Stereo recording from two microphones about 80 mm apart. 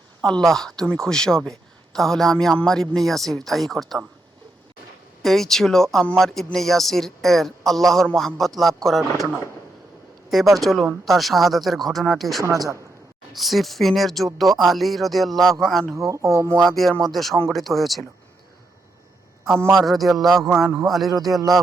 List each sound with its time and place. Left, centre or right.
0.2 s a man's voice: centre
5.2 s speech: centre
12.4 s speech: right
13.3 s speech: centre
15.9 s speech: right
16.6 s speech: centre
19.7 s speech: centre